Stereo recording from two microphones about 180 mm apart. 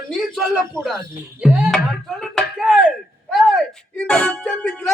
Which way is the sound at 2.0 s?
Centre (ahead or behind).